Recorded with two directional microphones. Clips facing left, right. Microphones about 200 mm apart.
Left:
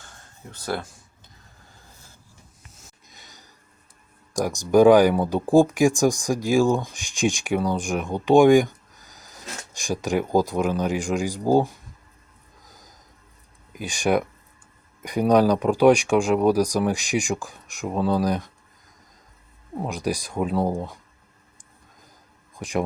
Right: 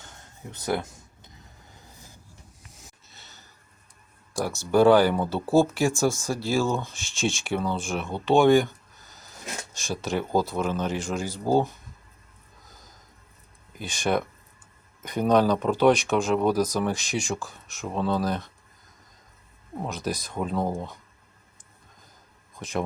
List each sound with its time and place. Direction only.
0.0 s a sound: 20° right (ahead or behind)
1.7 s vehicle: 20° right (ahead or behind)
3.1 s a sound: 15° left (ahead or behind)
4.4 s speech: 15° left (ahead or behind)
12.6 s snort: 15° left (ahead or behind)
13.7 s speech: 15° left (ahead or behind)
19.8 s speech: 10° left (ahead or behind)
22.5 s speech: 15° left (ahead or behind)